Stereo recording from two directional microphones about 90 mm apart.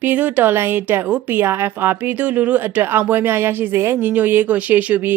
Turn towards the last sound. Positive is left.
turn(degrees=-20)  # may be behind; listen again after turning